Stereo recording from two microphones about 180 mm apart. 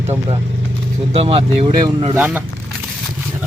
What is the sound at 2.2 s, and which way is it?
Speech, 10° right (ahead or behind).